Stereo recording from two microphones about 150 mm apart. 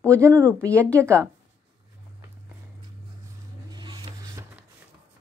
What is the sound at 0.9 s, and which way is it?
Speech, 20° right (ahead or behind).